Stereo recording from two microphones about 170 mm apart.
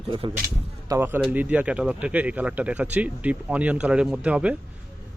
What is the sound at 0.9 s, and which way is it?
Speech, 15° right (ahead or behind).